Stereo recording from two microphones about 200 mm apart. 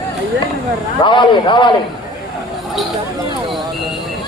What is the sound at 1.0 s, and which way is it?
Speech, 25° left (ahead or behind).